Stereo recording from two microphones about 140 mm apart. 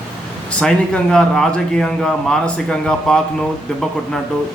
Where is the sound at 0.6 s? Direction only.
5° left (ahead or behind).